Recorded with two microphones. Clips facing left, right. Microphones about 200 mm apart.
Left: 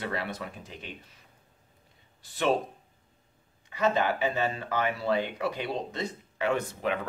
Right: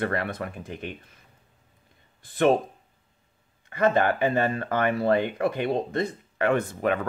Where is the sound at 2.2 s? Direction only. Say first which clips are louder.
Right 9 dB; 55° right (ahead or behind).